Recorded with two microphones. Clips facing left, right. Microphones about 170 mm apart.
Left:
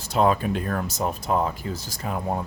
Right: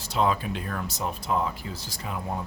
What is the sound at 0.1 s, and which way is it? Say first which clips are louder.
Speech: left 5 dB; 50° left (ahead or behind).